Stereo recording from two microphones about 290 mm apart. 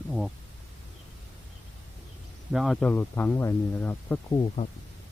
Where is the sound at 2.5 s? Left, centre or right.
Centre.